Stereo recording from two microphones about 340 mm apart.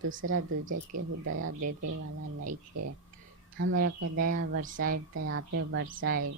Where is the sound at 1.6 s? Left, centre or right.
Right.